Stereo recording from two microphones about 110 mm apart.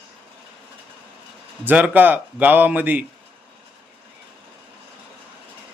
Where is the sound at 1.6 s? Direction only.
15° right (ahead or behind).